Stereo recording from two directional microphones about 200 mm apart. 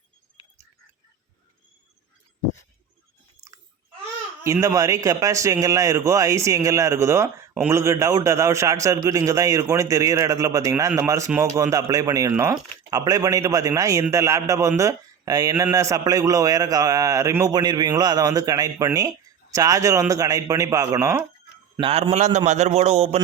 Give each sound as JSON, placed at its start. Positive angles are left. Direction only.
{"t": 4.4, "sound": "a man's voice", "side_deg": -15}
{"t": 21.8, "sound": "a man's voice", "side_deg": -25}